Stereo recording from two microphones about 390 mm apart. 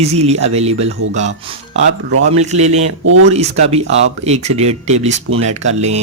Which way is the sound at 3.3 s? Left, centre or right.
Centre.